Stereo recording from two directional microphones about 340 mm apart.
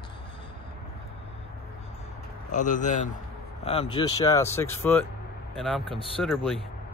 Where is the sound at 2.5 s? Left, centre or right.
Left.